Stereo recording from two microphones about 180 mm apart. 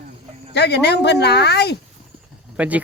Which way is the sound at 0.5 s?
70° left (ahead or behind).